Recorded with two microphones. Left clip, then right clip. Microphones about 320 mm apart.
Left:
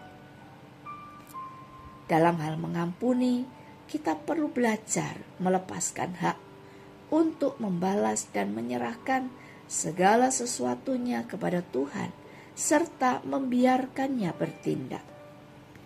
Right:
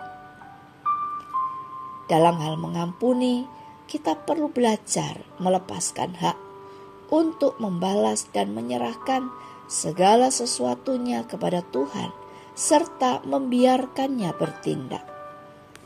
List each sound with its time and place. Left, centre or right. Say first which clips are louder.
2.0 s a woman's voice: right 5 dB; right